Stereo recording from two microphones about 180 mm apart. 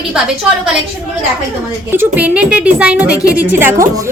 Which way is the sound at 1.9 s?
10° right (ahead or behind).